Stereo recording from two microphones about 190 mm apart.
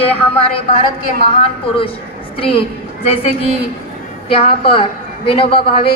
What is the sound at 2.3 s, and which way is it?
A woman's voice, 30° left (ahead or behind).